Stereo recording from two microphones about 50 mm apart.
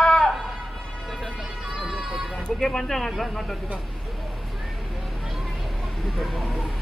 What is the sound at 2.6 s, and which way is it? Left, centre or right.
Speech, centre.